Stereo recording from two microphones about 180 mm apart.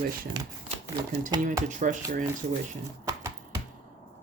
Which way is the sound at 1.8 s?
45° right (ahead or behind).